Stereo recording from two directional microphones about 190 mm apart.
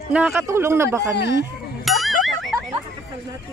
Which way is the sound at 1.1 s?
60° left (ahead or behind).